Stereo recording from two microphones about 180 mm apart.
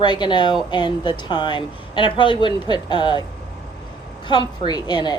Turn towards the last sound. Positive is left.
turn(degrees=25)  # may be behind; listen again after turning